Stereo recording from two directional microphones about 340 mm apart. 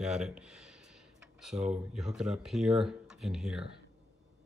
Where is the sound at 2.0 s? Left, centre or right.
Centre.